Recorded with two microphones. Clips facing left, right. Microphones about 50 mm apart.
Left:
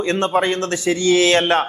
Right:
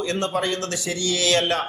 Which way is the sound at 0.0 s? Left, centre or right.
Left.